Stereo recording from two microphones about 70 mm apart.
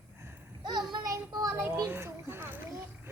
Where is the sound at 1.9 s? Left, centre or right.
Right.